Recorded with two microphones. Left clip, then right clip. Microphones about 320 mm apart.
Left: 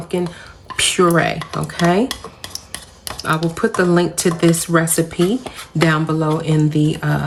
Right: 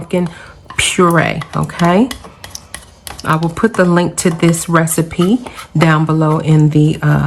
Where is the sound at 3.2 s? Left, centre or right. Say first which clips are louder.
Right 4 dB; centre.